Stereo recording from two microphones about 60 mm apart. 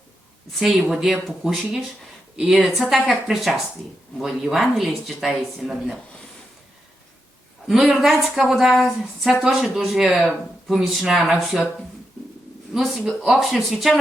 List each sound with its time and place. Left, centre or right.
0.6 s speech: centre
7.7 s speech: centre
12.7 s speech: centre